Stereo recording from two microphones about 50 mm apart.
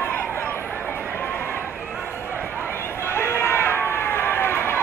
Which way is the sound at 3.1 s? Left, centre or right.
Left.